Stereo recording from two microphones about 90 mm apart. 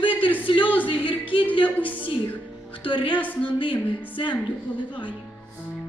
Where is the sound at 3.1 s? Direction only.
20° left (ahead or behind).